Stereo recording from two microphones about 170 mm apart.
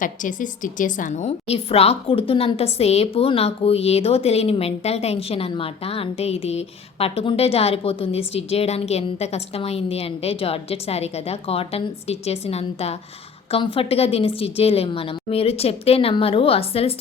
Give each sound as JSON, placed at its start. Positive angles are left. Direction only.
{"t": 0.0, "sound": "a woman's voice", "side_deg": 50}